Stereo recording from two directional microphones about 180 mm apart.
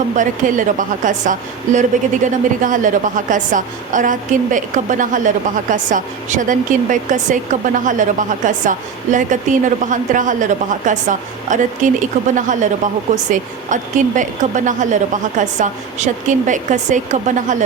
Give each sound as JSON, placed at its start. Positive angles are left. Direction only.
{"t": 0.2, "sound": "a woman's voice", "side_deg": -45}